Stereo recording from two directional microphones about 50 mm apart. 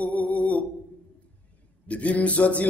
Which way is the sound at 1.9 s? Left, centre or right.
Left.